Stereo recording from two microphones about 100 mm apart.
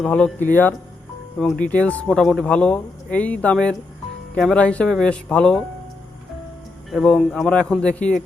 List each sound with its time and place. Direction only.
0.3 s speech: 20° left (ahead or behind)
6.9 s speech: 5° left (ahead or behind)